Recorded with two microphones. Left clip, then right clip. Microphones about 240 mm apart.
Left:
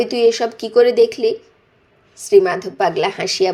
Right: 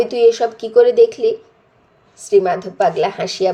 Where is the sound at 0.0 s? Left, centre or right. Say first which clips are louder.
Right 2 dB; left.